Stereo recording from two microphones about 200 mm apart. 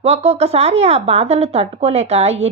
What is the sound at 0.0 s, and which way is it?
A woman's voice, 30° right (ahead or behind).